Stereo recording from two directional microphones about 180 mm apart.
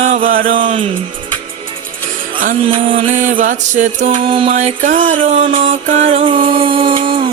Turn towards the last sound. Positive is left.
turn(degrees=-30)  # may be behind; listen again after turning